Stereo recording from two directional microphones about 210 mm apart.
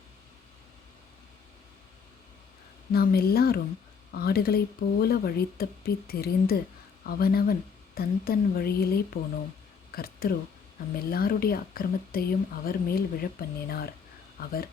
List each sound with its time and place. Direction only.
2.9 s speech: 45° left (ahead or behind)